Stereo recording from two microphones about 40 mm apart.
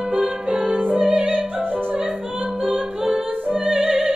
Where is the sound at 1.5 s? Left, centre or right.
Right.